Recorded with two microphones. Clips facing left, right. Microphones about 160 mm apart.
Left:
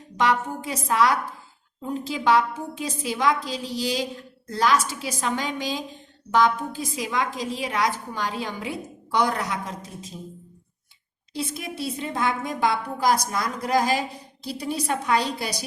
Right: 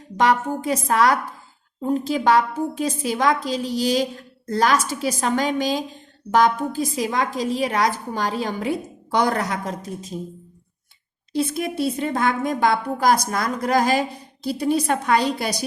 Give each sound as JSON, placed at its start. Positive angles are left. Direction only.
{"t": 0.2, "sound": "a woman's voice", "side_deg": -45}
{"t": 11.3, "sound": "a woman's voice", "side_deg": -55}